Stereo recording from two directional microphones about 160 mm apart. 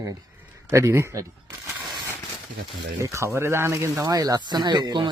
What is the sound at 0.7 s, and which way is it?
Speech, 15° right (ahead or behind).